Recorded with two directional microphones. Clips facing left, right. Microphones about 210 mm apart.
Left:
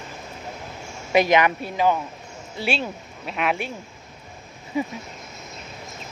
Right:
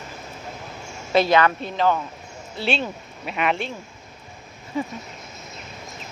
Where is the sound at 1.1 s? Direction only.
15° left (ahead or behind).